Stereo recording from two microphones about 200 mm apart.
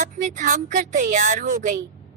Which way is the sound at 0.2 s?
40° right (ahead or behind).